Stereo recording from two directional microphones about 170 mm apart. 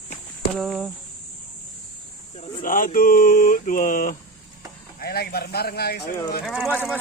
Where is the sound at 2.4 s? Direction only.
55° left (ahead or behind).